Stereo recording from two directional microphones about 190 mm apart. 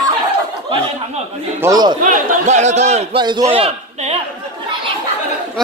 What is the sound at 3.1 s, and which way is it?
Speech, 25° right (ahead or behind).